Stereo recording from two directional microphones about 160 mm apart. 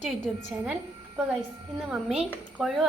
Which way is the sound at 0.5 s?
5° right (ahead or behind).